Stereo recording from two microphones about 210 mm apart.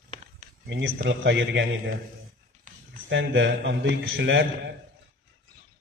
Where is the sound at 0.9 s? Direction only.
50° right (ahead or behind).